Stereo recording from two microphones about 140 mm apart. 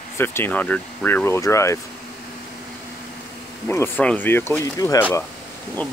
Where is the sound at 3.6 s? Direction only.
15° left (ahead or behind).